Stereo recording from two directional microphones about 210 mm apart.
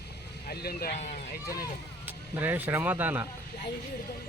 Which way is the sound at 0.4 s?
50° left (ahead or behind).